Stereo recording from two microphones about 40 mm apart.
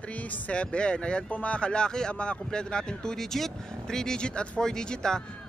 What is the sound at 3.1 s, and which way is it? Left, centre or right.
Speech, centre.